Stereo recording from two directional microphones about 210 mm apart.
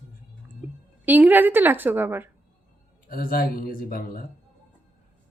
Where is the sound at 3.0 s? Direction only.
45° left (ahead or behind).